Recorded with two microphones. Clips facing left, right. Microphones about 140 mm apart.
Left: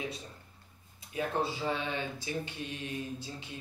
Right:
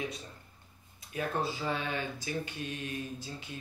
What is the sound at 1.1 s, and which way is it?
Speech, 25° left (ahead or behind).